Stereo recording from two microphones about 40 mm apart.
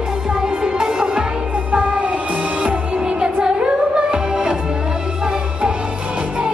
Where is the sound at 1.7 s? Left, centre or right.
Right.